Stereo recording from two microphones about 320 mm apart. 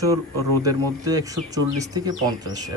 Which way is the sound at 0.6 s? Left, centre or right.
Centre.